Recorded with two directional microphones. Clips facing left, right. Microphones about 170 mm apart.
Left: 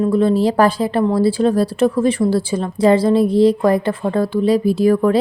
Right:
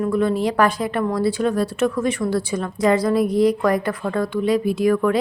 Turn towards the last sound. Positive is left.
turn(degrees=35)  # may be behind; listen again after turning